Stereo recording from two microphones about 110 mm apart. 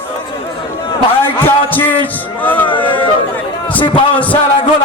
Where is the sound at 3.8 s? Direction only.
50° left (ahead or behind).